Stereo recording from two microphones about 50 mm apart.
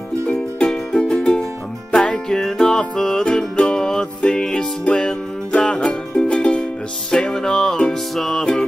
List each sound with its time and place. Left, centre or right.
0.7 s music: centre